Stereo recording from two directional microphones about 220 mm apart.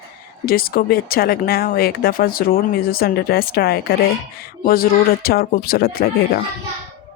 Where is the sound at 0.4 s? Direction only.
40° left (ahead or behind).